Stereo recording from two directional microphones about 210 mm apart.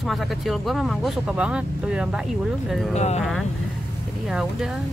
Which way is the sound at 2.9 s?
30° left (ahead or behind).